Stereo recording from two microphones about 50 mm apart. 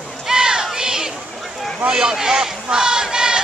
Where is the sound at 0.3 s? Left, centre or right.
Centre.